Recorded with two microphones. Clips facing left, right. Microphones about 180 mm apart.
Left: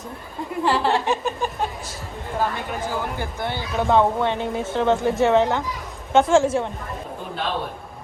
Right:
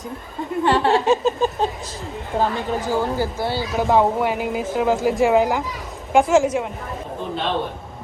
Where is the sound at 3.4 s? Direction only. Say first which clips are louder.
Right 4 dB; 20° left (ahead or behind).